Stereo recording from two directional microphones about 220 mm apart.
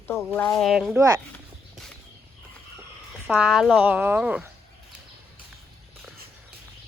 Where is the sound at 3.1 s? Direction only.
5° right (ahead or behind).